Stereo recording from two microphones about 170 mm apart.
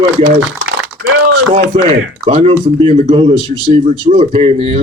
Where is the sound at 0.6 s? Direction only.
60° right (ahead or behind).